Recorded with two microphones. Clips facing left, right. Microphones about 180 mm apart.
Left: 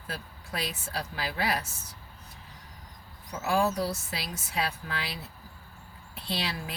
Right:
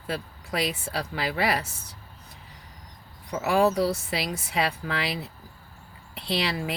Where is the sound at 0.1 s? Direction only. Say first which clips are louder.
Right 7 dB; 90° right.